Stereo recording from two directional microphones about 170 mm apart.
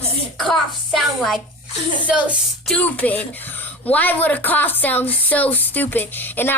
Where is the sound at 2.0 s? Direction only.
10° right (ahead or behind).